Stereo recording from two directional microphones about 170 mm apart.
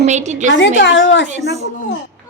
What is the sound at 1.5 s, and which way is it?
Speech, 40° right (ahead or behind).